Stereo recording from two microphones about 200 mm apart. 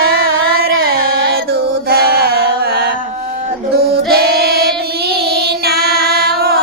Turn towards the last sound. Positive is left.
turn(degrees=-50)  # may be behind; listen again after turning